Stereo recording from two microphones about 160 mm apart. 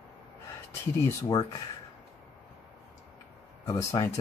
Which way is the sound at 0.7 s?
20° left (ahead or behind).